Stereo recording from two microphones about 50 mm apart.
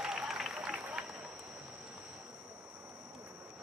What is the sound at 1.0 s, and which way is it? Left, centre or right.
Run, centre.